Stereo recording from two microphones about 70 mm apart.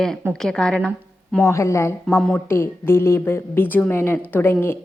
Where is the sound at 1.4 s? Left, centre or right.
Left.